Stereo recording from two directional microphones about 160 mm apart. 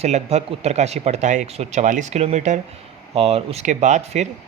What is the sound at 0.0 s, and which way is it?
Speech, 40° right (ahead or behind).